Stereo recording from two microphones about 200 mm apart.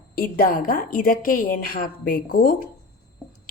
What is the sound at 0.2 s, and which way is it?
A woman's voice, 45° left (ahead or behind).